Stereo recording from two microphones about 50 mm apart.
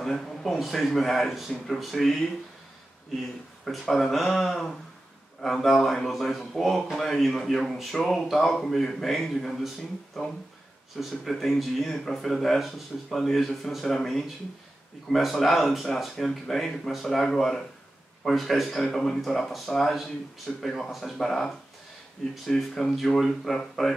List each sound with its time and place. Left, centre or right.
0.0 s speech: centre
11.0 s speech: centre